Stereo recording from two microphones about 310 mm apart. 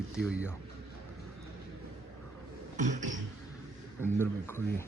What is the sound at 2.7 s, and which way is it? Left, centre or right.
Beatboxing, right.